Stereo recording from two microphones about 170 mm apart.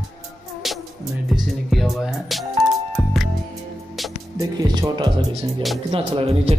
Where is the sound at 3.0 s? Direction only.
Centre (ahead or behind).